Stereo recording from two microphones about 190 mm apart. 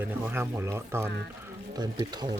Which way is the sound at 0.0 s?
10° right (ahead or behind).